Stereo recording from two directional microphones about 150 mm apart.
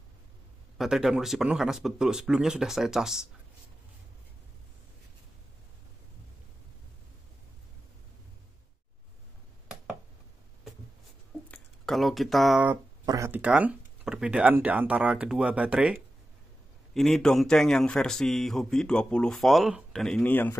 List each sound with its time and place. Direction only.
0.7 s speech: centre (ahead or behind)
11.5 s a sound: centre (ahead or behind)
13.0 s speech: 25° right (ahead or behind)
13.3 s speech: 10° right (ahead or behind); by 20.5 s 10° left (ahead or behind)